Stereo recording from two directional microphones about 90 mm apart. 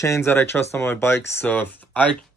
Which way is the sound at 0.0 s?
30° left (ahead or behind).